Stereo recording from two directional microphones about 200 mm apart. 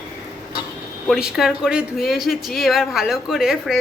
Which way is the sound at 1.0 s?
Centre (ahead or behind).